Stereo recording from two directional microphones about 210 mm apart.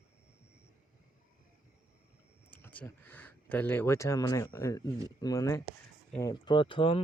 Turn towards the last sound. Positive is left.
turn(degrees=25)  # may be behind; listen again after turning